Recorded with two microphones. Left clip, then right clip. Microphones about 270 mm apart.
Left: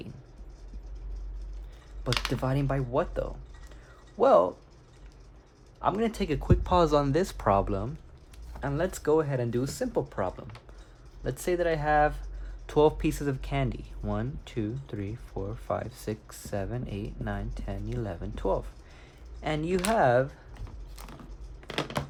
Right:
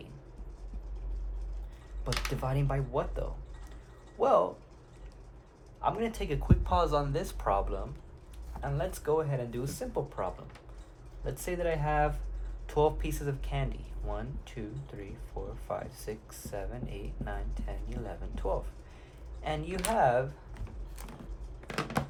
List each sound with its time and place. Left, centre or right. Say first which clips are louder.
2.4 s speech: left 4 dB; left
5.8 s speech: left 4 dB; left
21.7 s a sound: left 2 dB; centre